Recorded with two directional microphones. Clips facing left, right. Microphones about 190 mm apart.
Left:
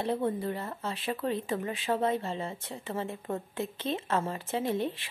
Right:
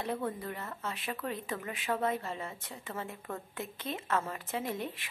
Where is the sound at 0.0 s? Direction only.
30° left (ahead or behind).